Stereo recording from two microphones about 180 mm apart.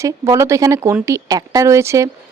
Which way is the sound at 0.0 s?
15° right (ahead or behind).